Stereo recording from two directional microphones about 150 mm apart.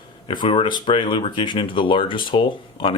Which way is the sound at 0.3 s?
35° left (ahead or behind).